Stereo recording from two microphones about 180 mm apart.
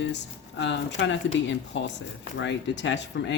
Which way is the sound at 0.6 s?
80° left.